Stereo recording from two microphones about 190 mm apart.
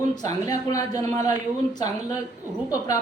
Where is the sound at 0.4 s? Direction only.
15° left (ahead or behind).